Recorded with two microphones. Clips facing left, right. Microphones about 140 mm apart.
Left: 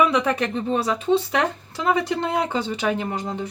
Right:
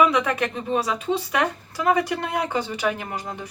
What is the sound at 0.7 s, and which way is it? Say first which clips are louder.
Speech: left 4 dB; 30° left (ahead or behind).